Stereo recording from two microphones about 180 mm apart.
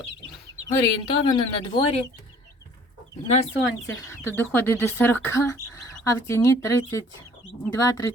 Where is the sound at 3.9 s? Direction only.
15° left (ahead or behind).